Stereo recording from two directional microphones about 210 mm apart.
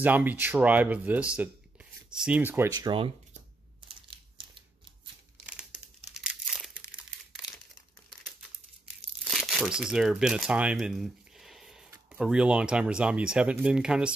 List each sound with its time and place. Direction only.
0.0 s speech: 10° right (ahead or behind)
6.1 s crumpling: centre (ahead or behind)
9.3 s crumpling: centre (ahead or behind)
11.9 s speech: 5° right (ahead or behind)